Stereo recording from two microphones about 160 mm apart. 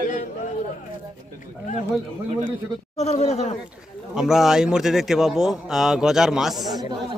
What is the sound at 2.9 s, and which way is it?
Speech, 40° left (ahead or behind).